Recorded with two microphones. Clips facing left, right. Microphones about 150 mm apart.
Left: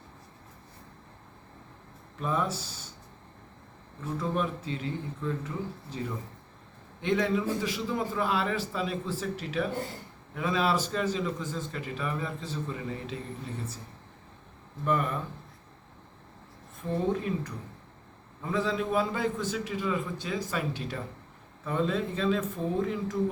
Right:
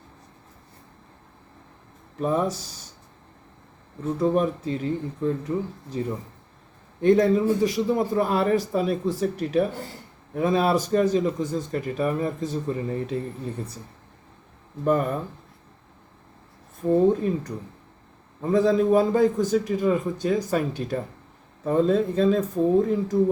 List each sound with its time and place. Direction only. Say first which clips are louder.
2.2 s speech: right 6 dB; 40° right (ahead or behind)
4.2 s a man's voice: right 9 dB; 40° right (ahead or behind)
14.8 s speech: right 6 dB; 40° right (ahead or behind)
17.1 s a man's voice: right 7 dB; 40° right (ahead or behind)